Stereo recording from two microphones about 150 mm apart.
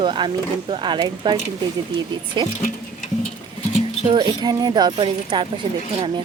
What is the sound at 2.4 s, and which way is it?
Speech, 30° right (ahead or behind).